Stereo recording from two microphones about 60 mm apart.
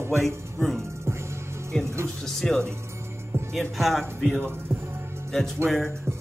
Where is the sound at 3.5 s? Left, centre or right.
Centre.